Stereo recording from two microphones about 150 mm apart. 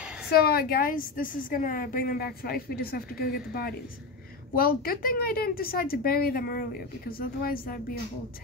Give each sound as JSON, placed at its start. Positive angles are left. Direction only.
{"t": 0.3, "sound": "a woman's voice", "side_deg": 90}